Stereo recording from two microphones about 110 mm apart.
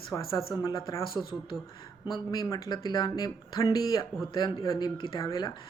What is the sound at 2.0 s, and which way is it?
Speech, 35° left (ahead or behind).